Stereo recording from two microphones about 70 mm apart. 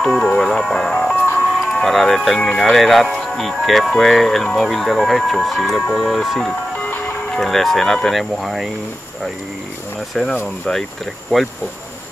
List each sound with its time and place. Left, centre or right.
0.0 s music: centre
1.1 s music: left
1.7 s speech: centre
6.8 s music: left
7.2 s speech: centre
10.3 s speech: centre
10.7 s speech: centre